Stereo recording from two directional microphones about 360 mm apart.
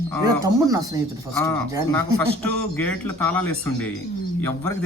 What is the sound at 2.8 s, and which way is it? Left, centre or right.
Speech, centre.